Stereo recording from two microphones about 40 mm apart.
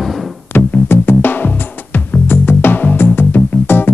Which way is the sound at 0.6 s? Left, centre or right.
Left.